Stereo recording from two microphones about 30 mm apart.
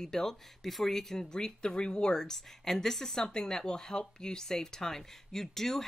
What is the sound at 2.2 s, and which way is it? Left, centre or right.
Speech, centre.